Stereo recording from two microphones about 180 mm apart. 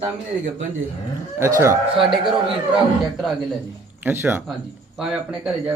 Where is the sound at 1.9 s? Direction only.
25° right (ahead or behind).